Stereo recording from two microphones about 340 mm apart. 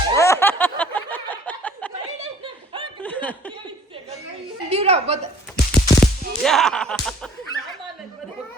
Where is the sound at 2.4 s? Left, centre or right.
Centre.